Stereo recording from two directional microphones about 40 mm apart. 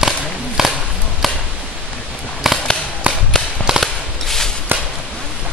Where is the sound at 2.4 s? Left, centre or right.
Centre.